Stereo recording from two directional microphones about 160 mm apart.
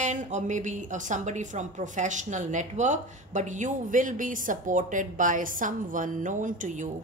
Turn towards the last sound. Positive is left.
turn(degrees=-50)  # may be behind; listen again after turning